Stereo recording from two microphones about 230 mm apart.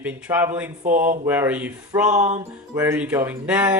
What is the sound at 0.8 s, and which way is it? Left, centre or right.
Speech, right.